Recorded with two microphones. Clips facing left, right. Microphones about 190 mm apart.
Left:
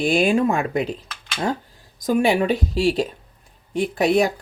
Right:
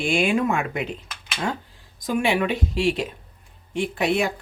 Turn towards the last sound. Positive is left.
turn(degrees=40)  # may be behind; listen again after turning